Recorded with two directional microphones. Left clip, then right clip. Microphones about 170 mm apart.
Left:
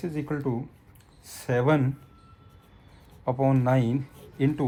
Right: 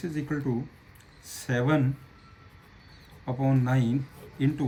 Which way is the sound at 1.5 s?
20° left (ahead or behind).